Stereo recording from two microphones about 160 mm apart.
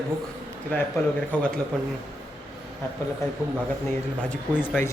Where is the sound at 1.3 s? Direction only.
10° left (ahead or behind).